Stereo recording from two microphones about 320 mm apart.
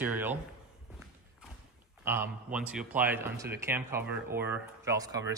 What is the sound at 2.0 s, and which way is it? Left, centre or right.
A man's voice, centre.